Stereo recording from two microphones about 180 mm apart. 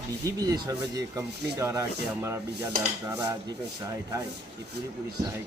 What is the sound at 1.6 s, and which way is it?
Sanding, 15° right (ahead or behind).